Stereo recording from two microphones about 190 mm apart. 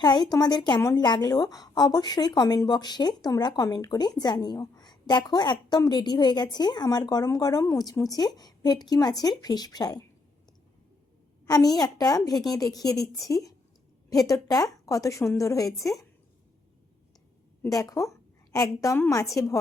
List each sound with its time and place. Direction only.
0.0 s a woman's voice: 20° left (ahead or behind)
11.4 s a woman's voice: 20° left (ahead or behind)
17.6 s speech: 20° left (ahead or behind)